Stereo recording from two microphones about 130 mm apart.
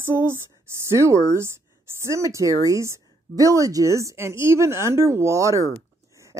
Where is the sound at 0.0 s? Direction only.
20° right (ahead or behind).